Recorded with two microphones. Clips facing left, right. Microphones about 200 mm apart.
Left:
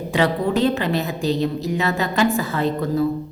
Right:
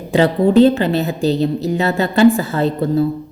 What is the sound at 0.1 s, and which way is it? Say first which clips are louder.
A woman's voice: right 7 dB; 30° right (ahead or behind).